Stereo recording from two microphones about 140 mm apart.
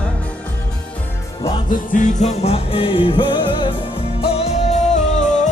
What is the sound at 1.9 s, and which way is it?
Music, 55° left (ahead or behind).